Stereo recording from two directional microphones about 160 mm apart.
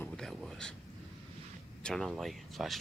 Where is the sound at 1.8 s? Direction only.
Centre (ahead or behind).